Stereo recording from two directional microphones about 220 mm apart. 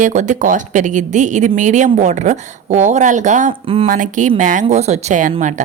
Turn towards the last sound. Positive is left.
turn(degrees=-35)  # may be behind; listen again after turning